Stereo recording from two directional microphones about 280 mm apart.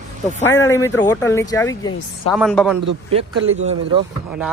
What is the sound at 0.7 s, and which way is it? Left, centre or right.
Speech, centre.